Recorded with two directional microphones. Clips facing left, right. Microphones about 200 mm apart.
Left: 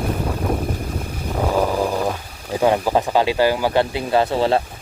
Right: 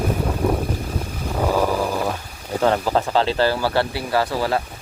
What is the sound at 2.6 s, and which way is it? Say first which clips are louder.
Speech: left 2 dB; 15° left (ahead or behind).